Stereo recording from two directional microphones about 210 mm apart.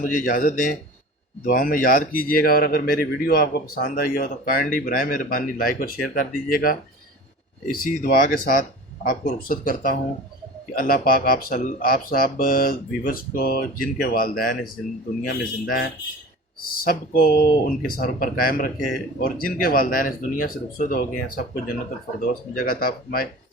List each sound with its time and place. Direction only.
0.0 s speech: 40° left (ahead or behind)